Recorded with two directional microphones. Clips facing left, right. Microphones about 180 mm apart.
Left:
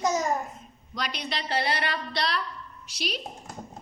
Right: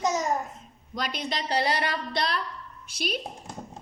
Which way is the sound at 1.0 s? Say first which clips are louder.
Right 2 dB; 50° right (ahead or behind).